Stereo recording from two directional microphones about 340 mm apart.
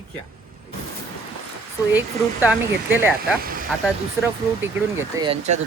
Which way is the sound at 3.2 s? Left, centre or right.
Right.